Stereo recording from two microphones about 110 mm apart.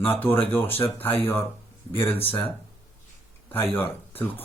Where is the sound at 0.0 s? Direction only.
20° left (ahead or behind).